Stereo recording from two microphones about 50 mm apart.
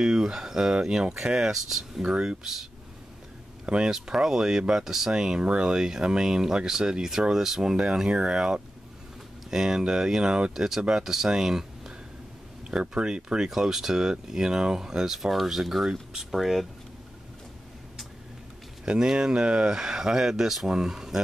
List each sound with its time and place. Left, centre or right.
0.0 s speech: centre
3.6 s speech: centre
18.9 s speech: centre